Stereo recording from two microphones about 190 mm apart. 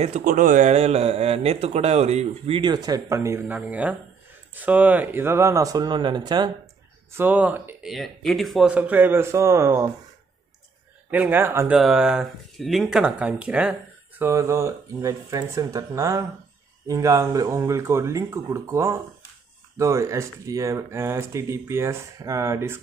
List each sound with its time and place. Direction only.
0.0 s a man's voice: 45° right (ahead or behind); by 6.5 s 20° right (ahead or behind)
7.2 s speech: 10° right (ahead or behind)
11.1 s speech: 10° right (ahead or behind)